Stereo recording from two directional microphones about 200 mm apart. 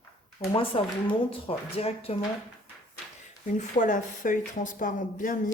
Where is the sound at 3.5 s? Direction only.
40° left (ahead or behind).